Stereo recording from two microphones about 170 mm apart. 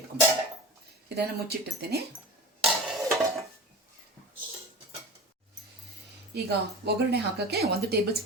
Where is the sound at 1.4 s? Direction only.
70° right (ahead or behind).